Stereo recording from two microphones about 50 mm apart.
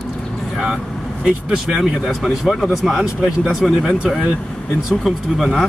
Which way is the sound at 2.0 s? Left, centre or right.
Centre.